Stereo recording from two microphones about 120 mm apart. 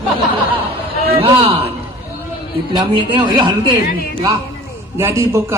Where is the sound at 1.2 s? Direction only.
50° right (ahead or behind).